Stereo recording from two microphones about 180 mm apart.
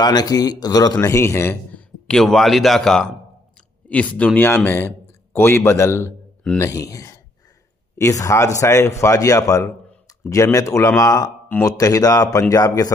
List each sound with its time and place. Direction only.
0.0 s a man's voice: 20° left (ahead or behind)
2.0 s a man's voice: centre (ahead or behind); by 12.9 s 20° left (ahead or behind)